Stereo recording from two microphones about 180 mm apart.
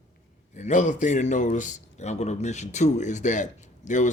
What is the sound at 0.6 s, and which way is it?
A man's voice, 40° left (ahead or behind).